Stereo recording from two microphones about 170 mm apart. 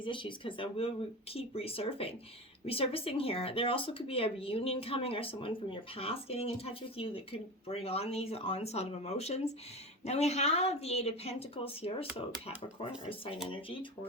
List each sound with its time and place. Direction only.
0.0 s speech: 30° left (ahead or behind)